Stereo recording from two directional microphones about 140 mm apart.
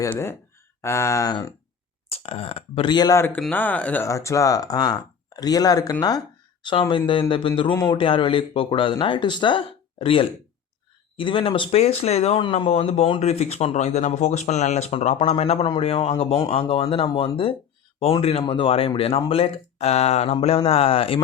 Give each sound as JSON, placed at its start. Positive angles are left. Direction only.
{"t": 0.1, "sound": "speech", "side_deg": 15}
{"t": 2.0, "sound": "speech", "side_deg": 45}
{"t": 3.2, "sound": "speech", "side_deg": 15}